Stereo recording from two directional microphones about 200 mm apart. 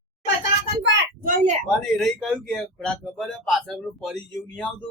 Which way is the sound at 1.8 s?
Centre (ahead or behind).